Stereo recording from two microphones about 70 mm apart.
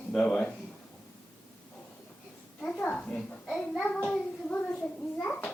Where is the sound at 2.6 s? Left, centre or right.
Centre.